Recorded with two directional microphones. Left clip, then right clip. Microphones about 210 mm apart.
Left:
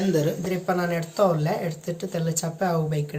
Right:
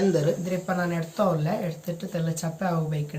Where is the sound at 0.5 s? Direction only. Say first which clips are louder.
Left 3 dB; 55° left (ahead or behind).